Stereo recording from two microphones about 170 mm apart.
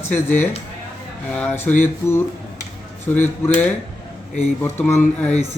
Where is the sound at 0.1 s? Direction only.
10° left (ahead or behind).